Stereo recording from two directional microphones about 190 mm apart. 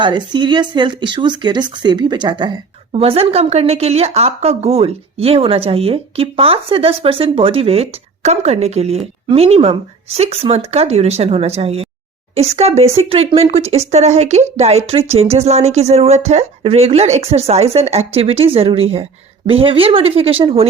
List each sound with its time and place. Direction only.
0.0 s a woman's voice: 25° right (ahead or behind)